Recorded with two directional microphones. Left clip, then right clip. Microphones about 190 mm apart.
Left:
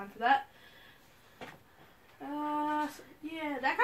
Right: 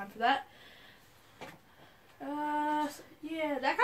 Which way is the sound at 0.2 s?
50° right (ahead or behind).